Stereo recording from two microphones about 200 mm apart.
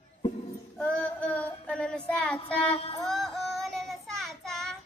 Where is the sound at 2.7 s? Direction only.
30° left (ahead or behind).